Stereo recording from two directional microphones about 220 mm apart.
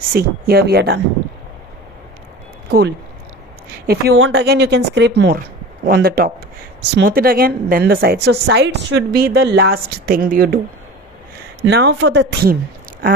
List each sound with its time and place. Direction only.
0.1 s a woman's voice: 45° right (ahead or behind)
3.8 s a woman's voice: 45° right (ahead or behind)
11.6 s a woman's voice: 50° right (ahead or behind)